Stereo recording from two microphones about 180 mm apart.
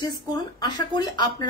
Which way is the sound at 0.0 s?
20° left (ahead or behind).